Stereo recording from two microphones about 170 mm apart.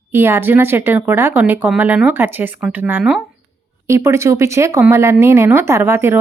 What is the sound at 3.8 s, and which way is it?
Speech, 15° right (ahead or behind).